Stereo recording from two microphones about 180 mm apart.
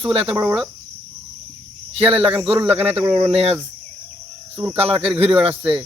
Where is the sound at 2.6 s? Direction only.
35° right (ahead or behind).